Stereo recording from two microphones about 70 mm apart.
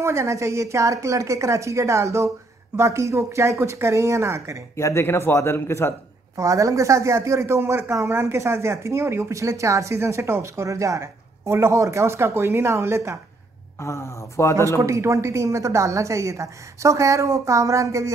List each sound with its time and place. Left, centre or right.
0.0 s a woman's voice: right
4.7 s a man's voice: left
6.3 s a woman's voice: right
9.3 s a woman's voice: right
13.7 s a man's voice: left
14.7 s a woman's voice: right